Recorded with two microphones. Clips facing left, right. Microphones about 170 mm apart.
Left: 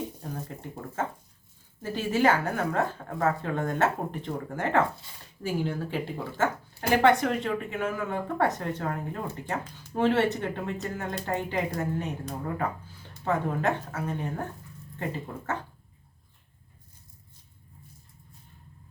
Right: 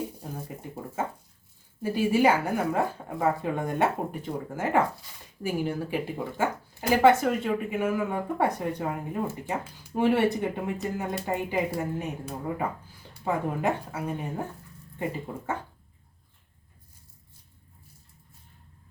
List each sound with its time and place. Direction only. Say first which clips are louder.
0.2 s speech: even; 10° right (ahead or behind)